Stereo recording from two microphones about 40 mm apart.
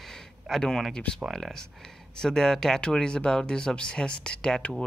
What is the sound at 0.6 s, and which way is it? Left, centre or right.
Speech, centre.